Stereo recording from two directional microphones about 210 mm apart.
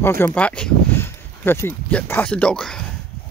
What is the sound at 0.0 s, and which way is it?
Speech, 10° left (ahead or behind).